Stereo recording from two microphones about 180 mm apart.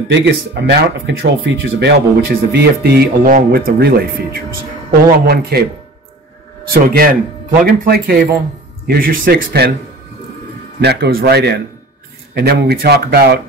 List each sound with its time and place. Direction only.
0.1 s speech: 80° right; by 5.6 s 60° right (ahead or behind)
6.7 s speech: 55° right (ahead or behind)
10.8 s speech: 65° right (ahead or behind)